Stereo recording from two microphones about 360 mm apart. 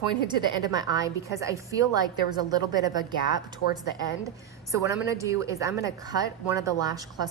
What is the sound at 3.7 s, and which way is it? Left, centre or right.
Speech, left.